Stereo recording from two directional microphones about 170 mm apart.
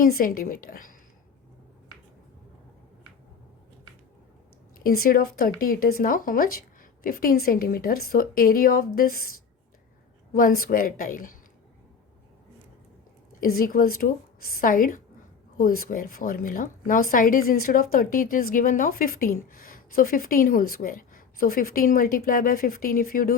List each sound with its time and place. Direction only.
0.0 s a woman's voice: 55° left (ahead or behind)
4.8 s a woman's voice: 60° left (ahead or behind)
10.3 s a woman's voice: 55° left (ahead or behind)
13.4 s a woman's voice: 55° left (ahead or behind)